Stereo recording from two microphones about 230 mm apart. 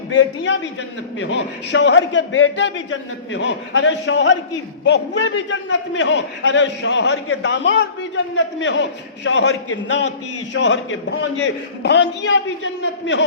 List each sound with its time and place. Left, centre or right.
0.1 s a man's voice: left